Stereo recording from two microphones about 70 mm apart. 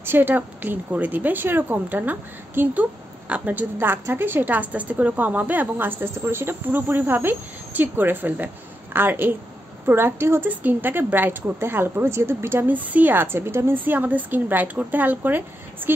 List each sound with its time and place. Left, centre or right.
0.0 s a woman's voice: right
10.5 s a woman's voice: right